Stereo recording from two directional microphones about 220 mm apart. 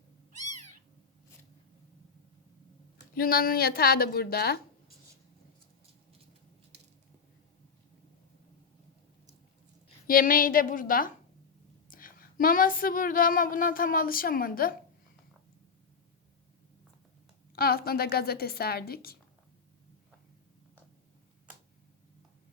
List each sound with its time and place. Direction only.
3.2 s a woman's voice: 40° left (ahead or behind)
10.1 s speech: 40° left (ahead or behind)
17.5 s a woman's voice: 45° left (ahead or behind)